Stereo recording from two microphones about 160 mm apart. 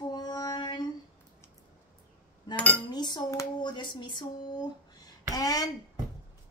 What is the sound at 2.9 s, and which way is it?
A woman's voice, 25° left (ahead or behind).